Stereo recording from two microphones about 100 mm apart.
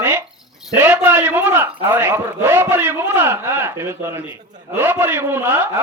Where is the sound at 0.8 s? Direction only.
20° right (ahead or behind).